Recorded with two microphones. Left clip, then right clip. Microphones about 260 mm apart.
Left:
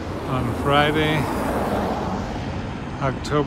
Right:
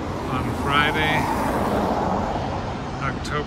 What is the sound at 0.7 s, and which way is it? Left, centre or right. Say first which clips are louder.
Speech: left 1 dB; centre.